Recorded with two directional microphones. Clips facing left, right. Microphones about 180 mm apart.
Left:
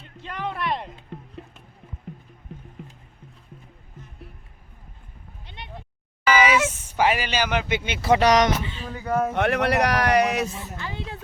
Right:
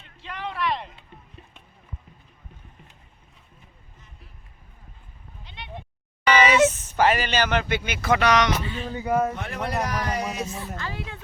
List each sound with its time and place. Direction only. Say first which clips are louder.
0.0 s music: left 3 dB; 45° left (ahead or behind)
1.4 s music: left 9 dB; 65° left (ahead or behind)
6.2 s a sound: even; 10° left (ahead or behind)
6.8 s speech: right 1 dB; 10° left (ahead or behind)
7.9 s speech: left 4 dB; 30° left (ahead or behind)
8.8 s speech: right 3 dB; 30° right (ahead or behind)
9.0 s speech: even; 5° right (ahead or behind)
9.3 s speech: left 8 dB; 70° left (ahead or behind)
10.6 s speech: right 1 dB; 20° left (ahead or behind)